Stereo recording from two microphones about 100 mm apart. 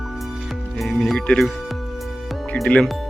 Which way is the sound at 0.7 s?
Centre (ahead or behind).